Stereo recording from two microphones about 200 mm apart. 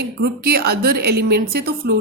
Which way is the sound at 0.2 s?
50° right (ahead or behind).